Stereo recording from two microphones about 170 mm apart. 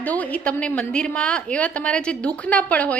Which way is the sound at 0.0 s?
10° left (ahead or behind).